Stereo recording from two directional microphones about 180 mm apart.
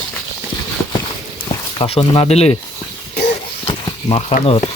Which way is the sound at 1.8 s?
30° left (ahead or behind).